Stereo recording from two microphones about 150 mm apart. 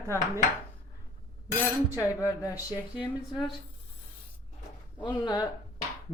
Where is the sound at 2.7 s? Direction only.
10° right (ahead or behind).